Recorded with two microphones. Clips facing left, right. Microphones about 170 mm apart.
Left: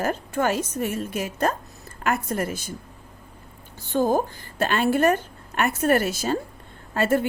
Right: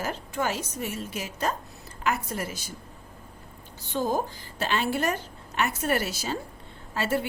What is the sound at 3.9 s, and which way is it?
Speech, 50° left (ahead or behind).